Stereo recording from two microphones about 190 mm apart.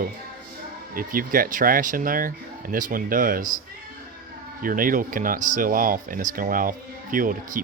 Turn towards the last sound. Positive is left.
turn(degrees=-45)  # may be behind; listen again after turning